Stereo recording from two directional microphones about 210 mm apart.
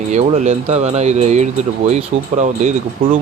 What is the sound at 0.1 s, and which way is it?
Speech, 35° right (ahead or behind).